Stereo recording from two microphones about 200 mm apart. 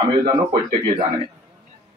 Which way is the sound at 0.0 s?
20° right (ahead or behind).